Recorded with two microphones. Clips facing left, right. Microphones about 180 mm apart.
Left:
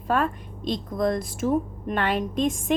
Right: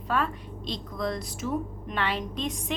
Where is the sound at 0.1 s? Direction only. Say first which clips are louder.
Left 4 dB; 50° left (ahead or behind).